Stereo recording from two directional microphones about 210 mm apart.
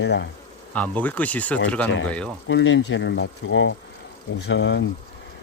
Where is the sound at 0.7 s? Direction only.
5° left (ahead or behind).